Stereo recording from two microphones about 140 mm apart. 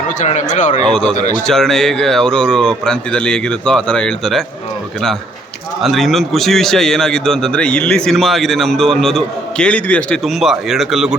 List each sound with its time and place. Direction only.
0.2 s speech: 55° left (ahead or behind)
1.5 s a man's voice: 5° left (ahead or behind)
5.8 s a man's voice: centre (ahead or behind)